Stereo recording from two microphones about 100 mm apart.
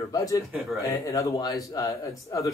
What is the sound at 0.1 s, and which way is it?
Speech, 35° left (ahead or behind).